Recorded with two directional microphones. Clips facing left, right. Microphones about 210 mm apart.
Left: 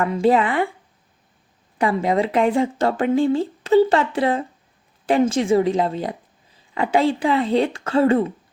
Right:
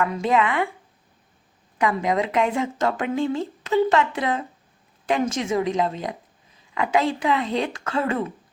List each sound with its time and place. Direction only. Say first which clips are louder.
0.0 s speech: left 4 dB; 35° left (ahead or behind)
1.8 s speech: left 3 dB; 30° left (ahead or behind)